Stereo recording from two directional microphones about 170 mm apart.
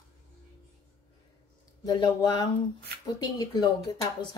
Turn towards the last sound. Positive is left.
turn(degrees=25)  # may be behind; listen again after turning